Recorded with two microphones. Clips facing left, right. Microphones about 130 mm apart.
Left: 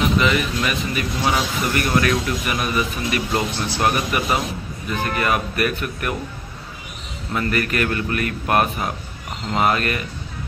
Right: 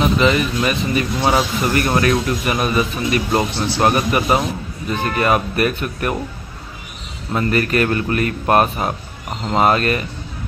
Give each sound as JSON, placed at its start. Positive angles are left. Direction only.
{"t": 0.0, "sound": "a man's voice", "side_deg": -35}
{"t": 7.3, "sound": "a man's voice", "side_deg": -30}